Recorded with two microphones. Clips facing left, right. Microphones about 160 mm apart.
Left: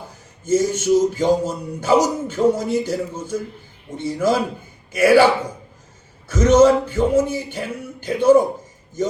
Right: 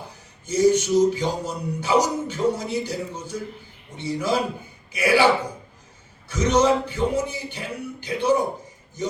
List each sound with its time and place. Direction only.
0.4 s speech: 50° left (ahead or behind)
6.2 s speech: 50° left (ahead or behind)